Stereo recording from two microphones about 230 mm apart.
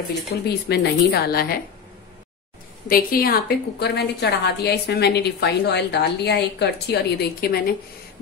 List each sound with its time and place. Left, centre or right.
0.4 s a woman's voice: left
2.9 s a woman's voice: left